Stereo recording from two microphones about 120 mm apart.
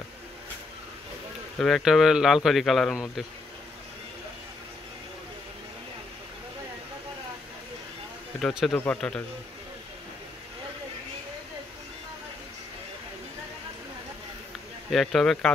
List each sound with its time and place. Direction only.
1.6 s speech: centre (ahead or behind)
8.4 s speech: centre (ahead or behind)
14.9 s speech: centre (ahead or behind)